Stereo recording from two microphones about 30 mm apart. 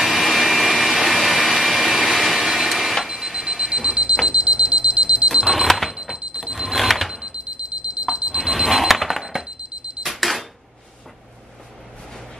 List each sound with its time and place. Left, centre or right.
0.2 s vacuum cleaner: centre
2.7 s a sound: centre
3.1 s alarm clock: centre
3.6 s alarm clock: right
5.7 s alarm clock: centre
6.1 s alarm clock: right
6.4 s alarm clock: centre
7.2 s alarm clock: right
8.5 s a sound: centre
10.0 s camera: centre